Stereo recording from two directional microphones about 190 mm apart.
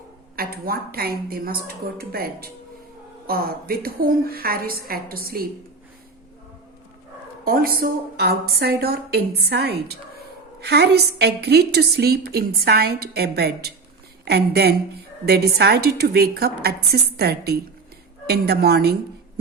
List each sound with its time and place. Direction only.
0.3 s a woman's voice: 50° right (ahead or behind)
7.4 s a woman's voice: 50° right (ahead or behind)